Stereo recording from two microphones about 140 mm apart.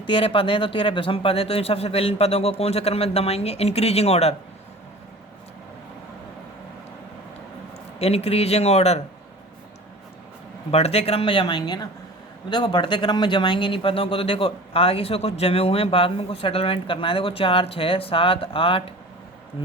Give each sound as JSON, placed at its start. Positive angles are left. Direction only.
{"t": 0.0, "sound": "speech", "side_deg": 40}
{"t": 7.9, "sound": "speech", "side_deg": 50}
{"t": 10.7, "sound": "speech", "side_deg": 45}